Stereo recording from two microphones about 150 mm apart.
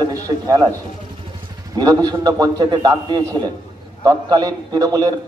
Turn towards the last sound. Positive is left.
turn(degrees=-25)  # may be behind; listen again after turning